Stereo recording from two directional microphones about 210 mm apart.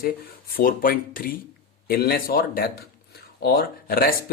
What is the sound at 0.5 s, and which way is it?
Speech, 45° left (ahead or behind).